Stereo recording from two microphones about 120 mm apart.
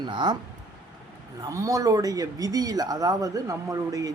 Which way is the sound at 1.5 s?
25° right (ahead or behind).